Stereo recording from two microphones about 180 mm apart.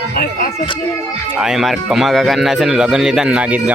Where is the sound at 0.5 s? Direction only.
30° left (ahead or behind).